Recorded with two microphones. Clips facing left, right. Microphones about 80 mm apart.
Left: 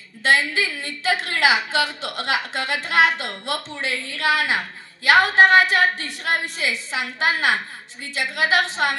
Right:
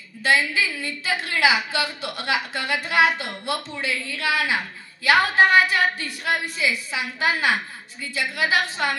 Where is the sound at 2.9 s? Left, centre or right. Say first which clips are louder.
Left 1 dB; right.